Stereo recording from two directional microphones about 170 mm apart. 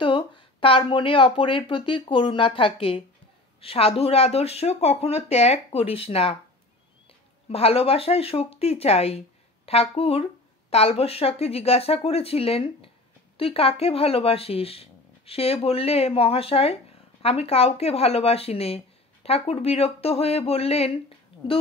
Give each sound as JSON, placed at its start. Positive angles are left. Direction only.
{"t": 0.0, "sound": "speech", "side_deg": 30}
{"t": 7.4, "sound": "speech", "side_deg": 35}
{"t": 21.3, "sound": "a sound", "side_deg": 35}